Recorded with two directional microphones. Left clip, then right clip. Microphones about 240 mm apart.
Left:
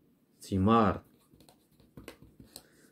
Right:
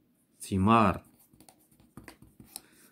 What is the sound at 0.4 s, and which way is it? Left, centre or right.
Speech, right.